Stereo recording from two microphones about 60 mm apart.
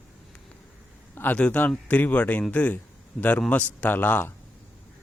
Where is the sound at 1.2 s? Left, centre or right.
Left.